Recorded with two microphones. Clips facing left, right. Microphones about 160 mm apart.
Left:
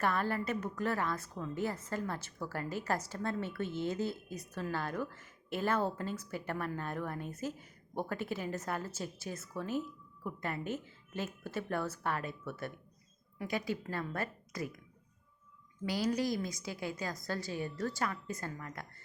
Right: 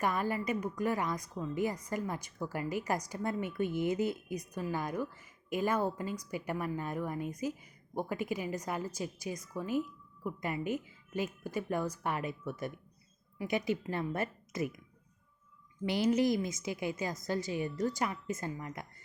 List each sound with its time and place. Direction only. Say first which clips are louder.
0.0 s a woman's voice: right 1 dB; 15° right (ahead or behind)
15.9 s a woman's voice: right 4 dB; 20° right (ahead or behind)